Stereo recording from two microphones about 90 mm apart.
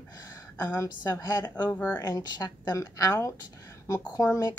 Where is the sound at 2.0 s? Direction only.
40° left (ahead or behind).